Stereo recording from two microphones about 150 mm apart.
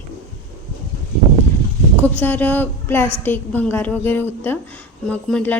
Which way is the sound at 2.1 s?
10° left (ahead or behind).